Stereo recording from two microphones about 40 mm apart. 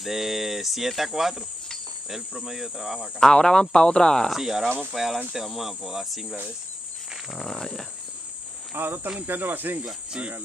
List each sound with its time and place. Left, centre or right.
0.0 s cricket: centre
3.2 s speech: centre
4.3 s cricket: centre
4.9 s speech: centre
5.3 s cricket: centre
7.5 s speech: centre
8.7 s speech: right